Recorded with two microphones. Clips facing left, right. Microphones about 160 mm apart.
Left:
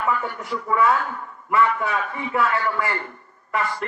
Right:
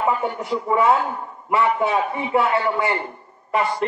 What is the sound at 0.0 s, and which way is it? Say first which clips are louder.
A man's voice: right 3 dB; 20° right (ahead or behind).